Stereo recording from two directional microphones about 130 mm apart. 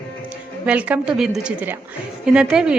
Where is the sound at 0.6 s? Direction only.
10° right (ahead or behind).